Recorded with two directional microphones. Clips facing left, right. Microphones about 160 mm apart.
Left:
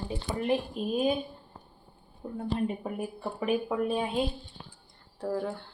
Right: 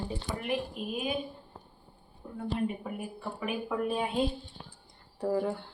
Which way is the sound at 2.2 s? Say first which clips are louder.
Left 2 dB; 35° left (ahead or behind).